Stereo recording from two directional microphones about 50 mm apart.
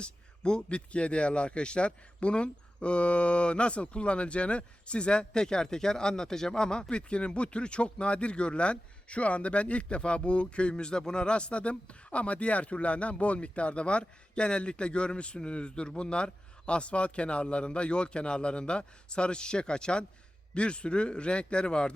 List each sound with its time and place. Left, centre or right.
0.0 s a man's voice: centre